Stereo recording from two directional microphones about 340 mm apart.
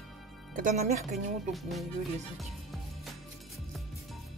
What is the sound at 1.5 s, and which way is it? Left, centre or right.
Music, centre.